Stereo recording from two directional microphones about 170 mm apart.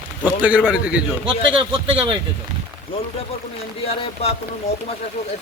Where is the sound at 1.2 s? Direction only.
30° right (ahead or behind).